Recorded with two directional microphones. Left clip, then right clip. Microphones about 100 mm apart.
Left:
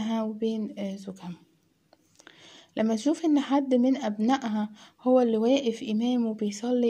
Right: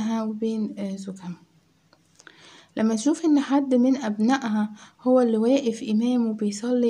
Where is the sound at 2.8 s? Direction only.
20° left (ahead or behind).